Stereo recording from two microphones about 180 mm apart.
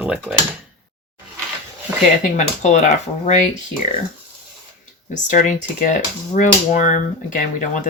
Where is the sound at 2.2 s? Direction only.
40° left (ahead or behind).